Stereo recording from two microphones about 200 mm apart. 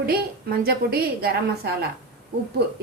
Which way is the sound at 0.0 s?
50° right (ahead or behind).